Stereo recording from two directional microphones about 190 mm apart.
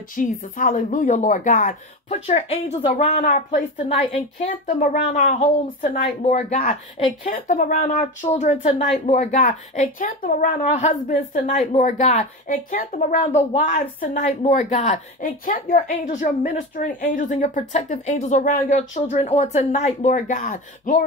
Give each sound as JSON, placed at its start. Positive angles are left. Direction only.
{"t": 0.1, "sound": "a woman's voice", "side_deg": 45}
{"t": 19.0, "sound": "a woman's voice", "side_deg": 35}